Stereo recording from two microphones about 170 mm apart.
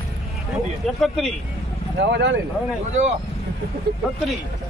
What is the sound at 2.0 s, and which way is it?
Speech, 90° right.